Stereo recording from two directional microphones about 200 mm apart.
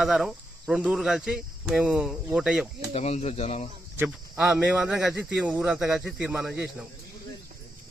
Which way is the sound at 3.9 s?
5° right (ahead or behind).